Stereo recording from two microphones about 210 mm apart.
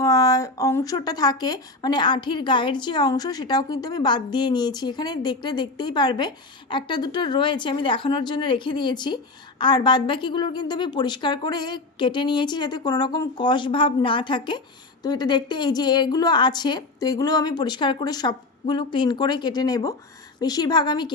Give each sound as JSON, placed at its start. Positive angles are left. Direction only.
{"t": 0.0, "sound": "speech", "side_deg": 15}